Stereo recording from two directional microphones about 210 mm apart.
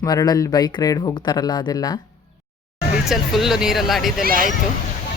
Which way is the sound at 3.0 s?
Centre (ahead or behind).